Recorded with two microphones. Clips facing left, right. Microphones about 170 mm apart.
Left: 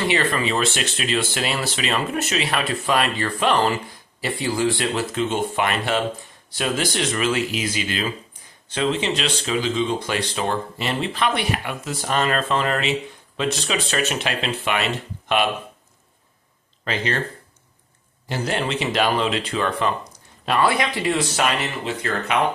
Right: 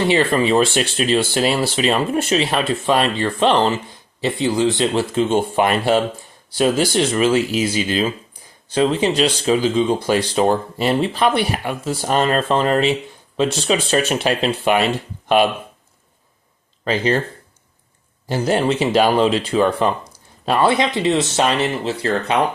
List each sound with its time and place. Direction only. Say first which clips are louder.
0.1 s speech: right 6 dB; 30° right (ahead or behind)
16.8 s speech: right 7 dB; 35° right (ahead or behind)
18.3 s speech: right 7 dB; 35° right (ahead or behind)